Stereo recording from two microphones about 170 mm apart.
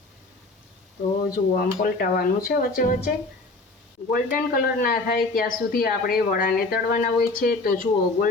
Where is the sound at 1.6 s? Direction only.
55° left (ahead or behind).